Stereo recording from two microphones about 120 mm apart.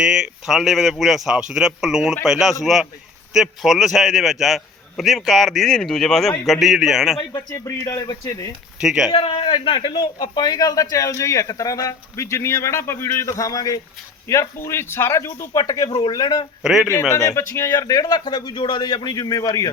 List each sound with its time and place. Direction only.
0.1 s a man's voice: 5° right (ahead or behind)
7.5 s a man's voice: 25° left (ahead or behind)
8.8 s a man's voice: 5° right (ahead or behind)
9.2 s a man's voice: 45° left (ahead or behind)
16.8 s a man's voice: 20° left (ahead or behind)